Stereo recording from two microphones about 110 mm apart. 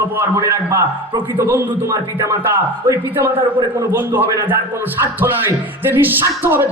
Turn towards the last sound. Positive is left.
turn(degrees=-20)  # may be behind; listen again after turning